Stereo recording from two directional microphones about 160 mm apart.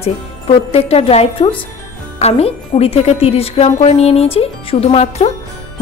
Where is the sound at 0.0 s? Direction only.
40° left (ahead or behind).